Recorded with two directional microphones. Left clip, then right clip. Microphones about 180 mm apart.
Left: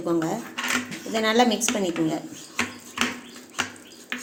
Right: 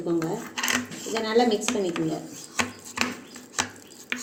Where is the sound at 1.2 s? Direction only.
40° left (ahead or behind).